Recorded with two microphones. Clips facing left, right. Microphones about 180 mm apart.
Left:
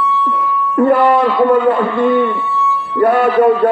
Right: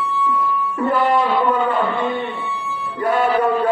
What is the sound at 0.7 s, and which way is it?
A man's voice, 60° left (ahead or behind).